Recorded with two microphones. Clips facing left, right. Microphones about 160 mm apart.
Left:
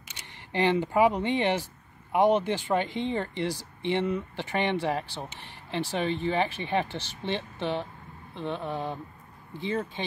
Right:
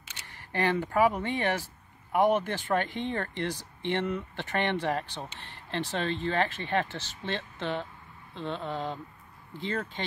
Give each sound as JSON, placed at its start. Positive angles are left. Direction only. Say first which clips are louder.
{"t": 0.5, "sound": "speech", "louder": "left 3 dB", "side_deg": 20}